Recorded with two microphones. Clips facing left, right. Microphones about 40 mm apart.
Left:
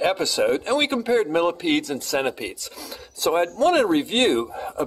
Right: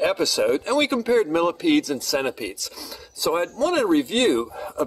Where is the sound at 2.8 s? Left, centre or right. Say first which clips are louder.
Left 2 dB; left.